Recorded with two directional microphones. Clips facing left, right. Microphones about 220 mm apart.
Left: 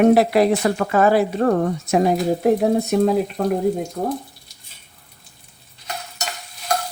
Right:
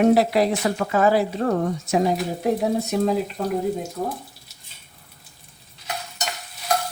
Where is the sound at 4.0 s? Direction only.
50° left (ahead or behind).